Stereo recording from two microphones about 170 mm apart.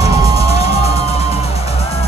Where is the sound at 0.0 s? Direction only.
20° right (ahead or behind).